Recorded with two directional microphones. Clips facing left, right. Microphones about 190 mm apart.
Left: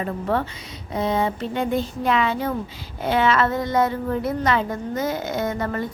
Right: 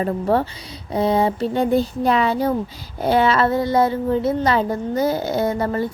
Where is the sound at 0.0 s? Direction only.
35° right (ahead or behind).